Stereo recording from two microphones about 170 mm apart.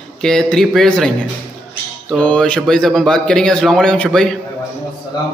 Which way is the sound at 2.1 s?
5° left (ahead or behind).